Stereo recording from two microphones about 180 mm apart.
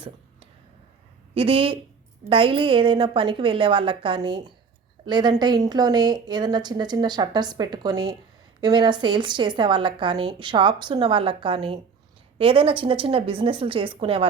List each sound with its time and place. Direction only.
1.3 s a woman's voice: 30° right (ahead or behind)